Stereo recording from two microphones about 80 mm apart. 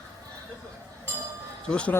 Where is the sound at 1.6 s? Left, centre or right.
Centre.